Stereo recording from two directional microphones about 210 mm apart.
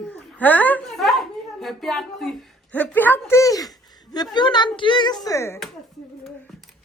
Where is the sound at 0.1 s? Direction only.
10° left (ahead or behind).